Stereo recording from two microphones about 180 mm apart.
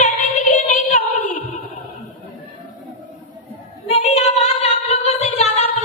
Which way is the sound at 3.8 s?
35° left (ahead or behind).